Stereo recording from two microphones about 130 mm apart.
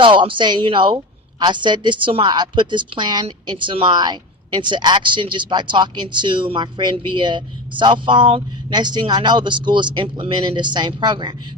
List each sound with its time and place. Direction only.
0.0 s a woman's voice: 40° right (ahead or behind)